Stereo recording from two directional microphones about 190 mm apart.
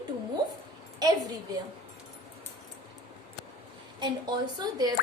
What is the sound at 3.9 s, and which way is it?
Speech, 20° right (ahead or behind).